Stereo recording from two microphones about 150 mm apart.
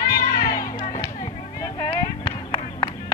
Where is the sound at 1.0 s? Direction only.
20° left (ahead or behind).